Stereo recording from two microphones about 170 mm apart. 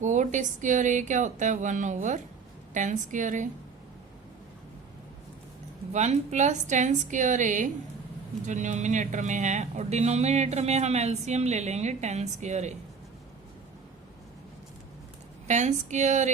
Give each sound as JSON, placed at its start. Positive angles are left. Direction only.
{"t": 0.0, "sound": "speech", "side_deg": -45}
{"t": 5.9, "sound": "speech", "side_deg": -45}
{"t": 15.4, "sound": "speech", "side_deg": -45}